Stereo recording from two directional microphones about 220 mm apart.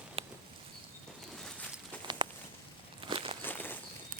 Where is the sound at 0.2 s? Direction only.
25° right (ahead or behind).